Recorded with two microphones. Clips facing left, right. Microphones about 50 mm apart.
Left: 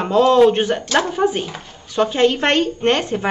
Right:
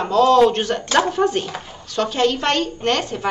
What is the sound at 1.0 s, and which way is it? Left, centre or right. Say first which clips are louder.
Speech: right 1 dB; centre.